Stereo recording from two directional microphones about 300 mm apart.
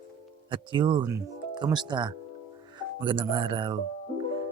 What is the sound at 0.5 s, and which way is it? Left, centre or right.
Speech, centre.